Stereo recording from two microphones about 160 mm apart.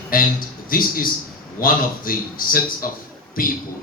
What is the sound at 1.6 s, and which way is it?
A man's voice, 60° left (ahead or behind).